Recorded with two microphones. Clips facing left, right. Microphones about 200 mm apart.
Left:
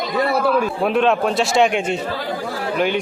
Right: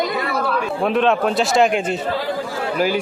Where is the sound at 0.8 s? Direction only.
Centre (ahead or behind).